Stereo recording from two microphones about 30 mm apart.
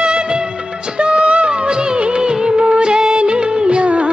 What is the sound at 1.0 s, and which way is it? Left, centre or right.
Music of bollywood, right.